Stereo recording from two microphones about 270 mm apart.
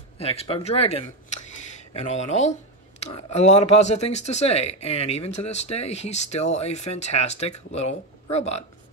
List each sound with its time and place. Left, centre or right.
0.2 s speech: left